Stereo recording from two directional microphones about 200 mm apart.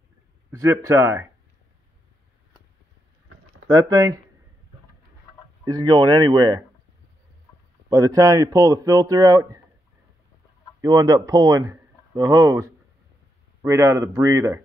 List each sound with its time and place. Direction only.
0.5 s speech: 15° right (ahead or behind)
3.6 s speech: 15° right (ahead or behind)
5.7 s speech: 20° right (ahead or behind)
7.9 s speech: 15° right (ahead or behind)
10.8 s speech: 20° right (ahead or behind)